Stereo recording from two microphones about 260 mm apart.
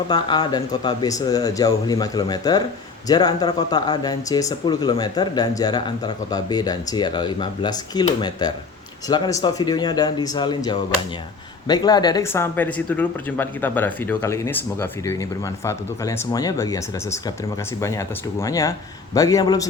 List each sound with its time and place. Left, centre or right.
0.1 s speech: centre